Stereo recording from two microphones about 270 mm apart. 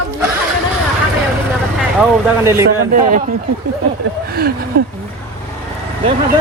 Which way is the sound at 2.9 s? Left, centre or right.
Right.